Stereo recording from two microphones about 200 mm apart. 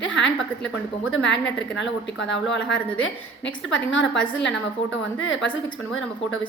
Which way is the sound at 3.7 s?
70° left (ahead or behind).